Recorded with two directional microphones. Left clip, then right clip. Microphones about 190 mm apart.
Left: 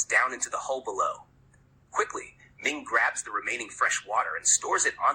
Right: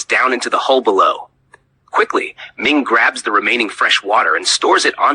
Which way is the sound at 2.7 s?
40° right (ahead or behind).